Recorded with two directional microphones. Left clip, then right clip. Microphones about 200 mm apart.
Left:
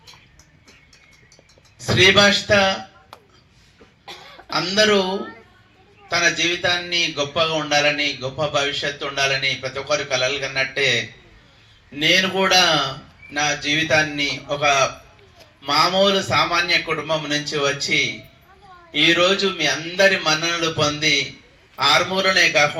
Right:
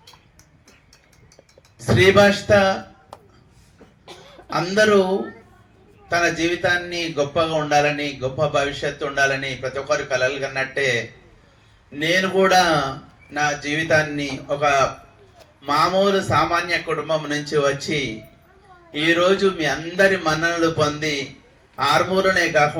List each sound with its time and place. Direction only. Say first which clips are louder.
1.9 s speech: even; 50° right (ahead or behind)
4.4 s speech: even; 50° right (ahead or behind)
6.1 s speech: left 1 dB; 50° right (ahead or behind)